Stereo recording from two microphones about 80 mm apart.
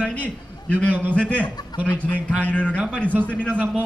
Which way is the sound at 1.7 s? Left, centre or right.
Left.